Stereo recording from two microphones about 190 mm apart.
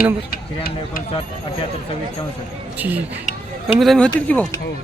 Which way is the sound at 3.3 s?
40° left (ahead or behind).